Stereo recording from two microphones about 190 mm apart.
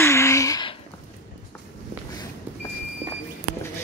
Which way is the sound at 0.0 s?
15° left (ahead or behind).